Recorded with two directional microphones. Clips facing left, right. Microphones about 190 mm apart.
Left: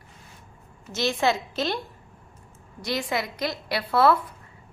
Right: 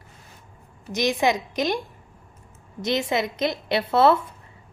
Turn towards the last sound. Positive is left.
turn(degrees=-25)  # may be behind; listen again after turning